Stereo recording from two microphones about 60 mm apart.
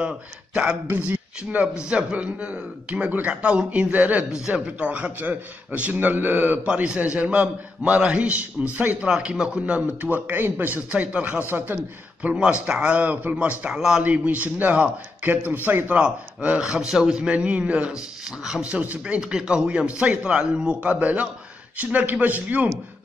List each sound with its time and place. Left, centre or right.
0.8 s a man's voice: right
6.7 s a man's voice: centre
11.5 s a man's voice: right
12.2 s a man's voice: centre
13.7 s speech: centre
14.0 s a man's voice: right
16.0 s a man's voice: centre